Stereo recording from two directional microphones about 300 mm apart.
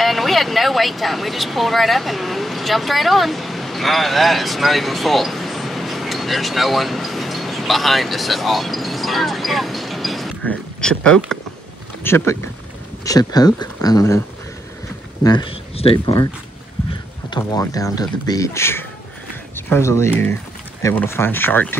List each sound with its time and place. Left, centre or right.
0.0 s speech: centre
15.2 s speech: centre
17.3 s speech: centre